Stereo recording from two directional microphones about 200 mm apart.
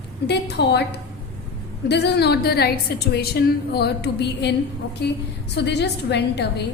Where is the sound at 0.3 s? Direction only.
55° left (ahead or behind).